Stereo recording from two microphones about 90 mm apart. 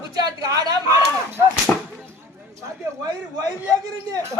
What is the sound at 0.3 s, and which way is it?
Speech, 40° right (ahead or behind).